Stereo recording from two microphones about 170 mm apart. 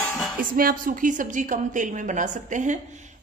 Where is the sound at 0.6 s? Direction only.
55° right (ahead or behind).